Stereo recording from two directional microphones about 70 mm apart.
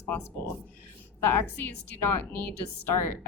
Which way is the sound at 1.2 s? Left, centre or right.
Left.